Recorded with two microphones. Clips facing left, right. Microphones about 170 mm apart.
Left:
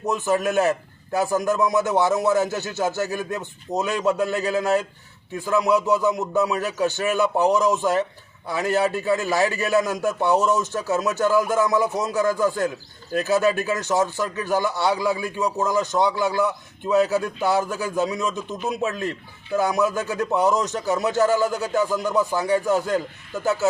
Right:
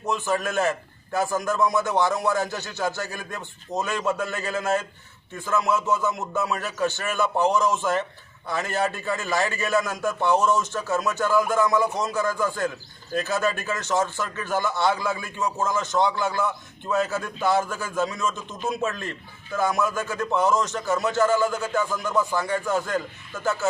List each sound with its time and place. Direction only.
0.1 s a man's voice: 20° left (ahead or behind)